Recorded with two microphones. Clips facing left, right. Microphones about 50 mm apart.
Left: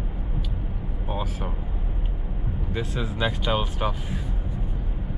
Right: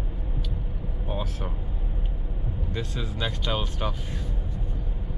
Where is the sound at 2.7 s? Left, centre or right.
Centre.